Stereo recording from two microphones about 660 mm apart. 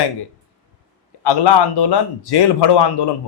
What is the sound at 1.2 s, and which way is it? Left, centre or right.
Speech, left.